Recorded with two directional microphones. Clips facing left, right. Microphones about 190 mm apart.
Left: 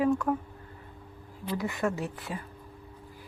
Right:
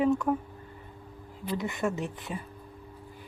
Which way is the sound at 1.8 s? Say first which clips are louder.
Even; 5° right (ahead or behind).